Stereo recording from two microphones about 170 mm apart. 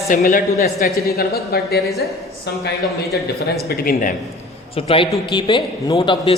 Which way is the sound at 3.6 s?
65° left (ahead or behind).